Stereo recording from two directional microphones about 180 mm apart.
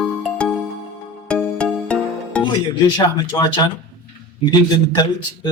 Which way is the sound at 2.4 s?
25° left (ahead or behind).